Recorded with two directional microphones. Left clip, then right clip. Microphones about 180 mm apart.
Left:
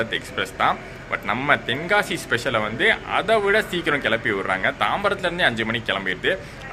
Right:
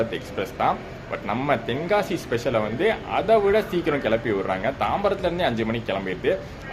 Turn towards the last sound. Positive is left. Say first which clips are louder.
# left 2 dB
turn(degrees=-10)  # may be behind; listen again after turning